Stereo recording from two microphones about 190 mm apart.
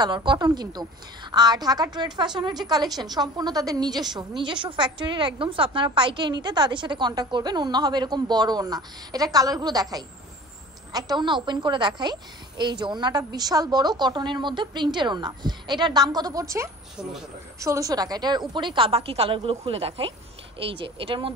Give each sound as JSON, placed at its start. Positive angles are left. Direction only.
{"t": 0.0, "sound": "a woman's voice", "side_deg": -25}